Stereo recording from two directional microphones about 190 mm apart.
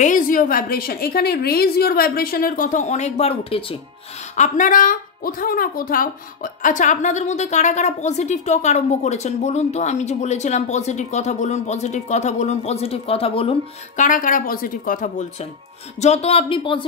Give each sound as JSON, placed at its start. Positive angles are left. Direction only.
{"t": 0.0, "sound": "a woman's voice", "side_deg": 45}
{"t": 4.4, "sound": "speech", "side_deg": 45}
{"t": 14.0, "sound": "a woman's voice", "side_deg": 45}